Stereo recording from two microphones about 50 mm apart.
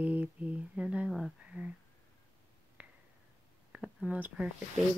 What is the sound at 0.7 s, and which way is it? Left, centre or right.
Speech, right.